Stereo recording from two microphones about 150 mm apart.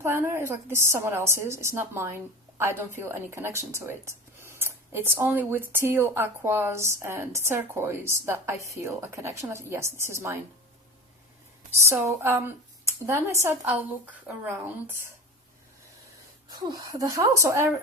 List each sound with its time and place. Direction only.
0.0 s a woman's voice: 15° right (ahead or behind)
12.2 s a woman's voice: 15° right (ahead or behind)
16.5 s speech: 25° right (ahead or behind)